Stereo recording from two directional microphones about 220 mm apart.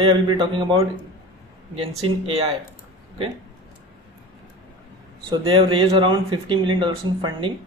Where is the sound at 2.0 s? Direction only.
25° right (ahead or behind).